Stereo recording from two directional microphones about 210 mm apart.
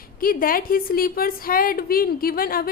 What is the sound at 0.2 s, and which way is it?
A woman's voice, 45° left (ahead or behind).